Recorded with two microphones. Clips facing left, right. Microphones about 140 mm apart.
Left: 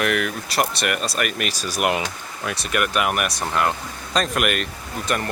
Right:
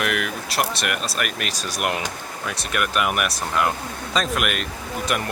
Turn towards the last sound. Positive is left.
turn(degrees=-5)  # may be behind; listen again after turning